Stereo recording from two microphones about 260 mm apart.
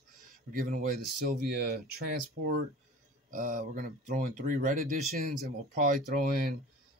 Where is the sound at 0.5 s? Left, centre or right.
Right.